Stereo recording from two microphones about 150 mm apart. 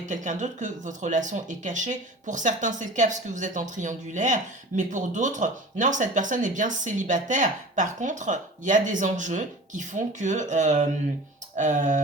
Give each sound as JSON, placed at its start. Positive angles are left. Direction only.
{"t": 0.0, "sound": "speech", "side_deg": -55}